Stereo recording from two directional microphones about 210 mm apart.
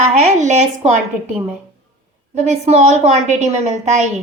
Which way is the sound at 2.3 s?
35° right (ahead or behind).